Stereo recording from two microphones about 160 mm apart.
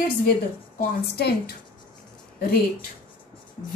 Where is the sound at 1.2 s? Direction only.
80° left.